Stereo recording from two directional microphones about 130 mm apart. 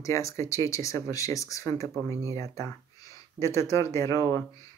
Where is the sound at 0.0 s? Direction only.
25° left (ahead or behind).